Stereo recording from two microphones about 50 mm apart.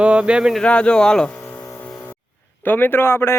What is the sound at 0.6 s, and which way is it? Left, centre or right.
Speech, left.